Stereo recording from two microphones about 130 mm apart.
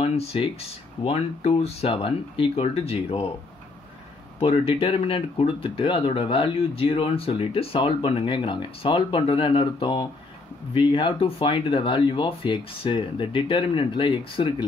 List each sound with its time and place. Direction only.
0.0 s speech: 50° left (ahead or behind)
4.4 s speech: 45° left (ahead or behind)